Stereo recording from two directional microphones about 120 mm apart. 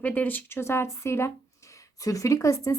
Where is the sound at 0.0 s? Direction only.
15° left (ahead or behind).